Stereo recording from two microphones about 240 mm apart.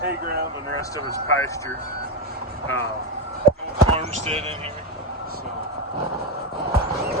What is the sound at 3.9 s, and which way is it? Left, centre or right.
Speech, right.